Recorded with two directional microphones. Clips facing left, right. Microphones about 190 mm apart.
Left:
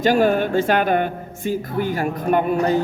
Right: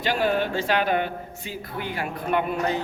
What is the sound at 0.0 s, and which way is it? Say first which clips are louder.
A woman's voice: left 7 dB; 45° left (ahead or behind).